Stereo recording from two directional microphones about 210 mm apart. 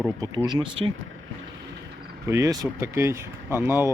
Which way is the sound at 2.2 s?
15° right (ahead or behind).